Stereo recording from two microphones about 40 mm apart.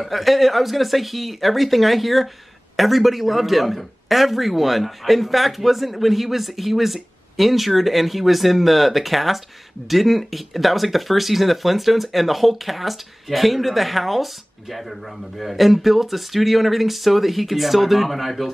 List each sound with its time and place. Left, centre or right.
0.0 s speech: centre